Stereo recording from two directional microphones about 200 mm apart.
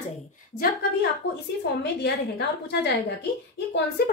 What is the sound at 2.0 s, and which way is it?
Speech, 55° left (ahead or behind).